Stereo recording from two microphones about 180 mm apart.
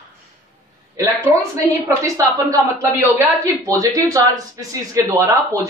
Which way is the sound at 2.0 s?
20° right (ahead or behind).